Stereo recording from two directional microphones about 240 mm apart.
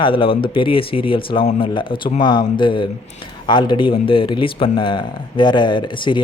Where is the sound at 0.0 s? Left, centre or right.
Left.